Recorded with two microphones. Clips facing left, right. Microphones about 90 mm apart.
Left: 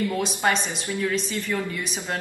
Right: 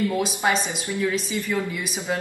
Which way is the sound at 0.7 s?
15° right (ahead or behind).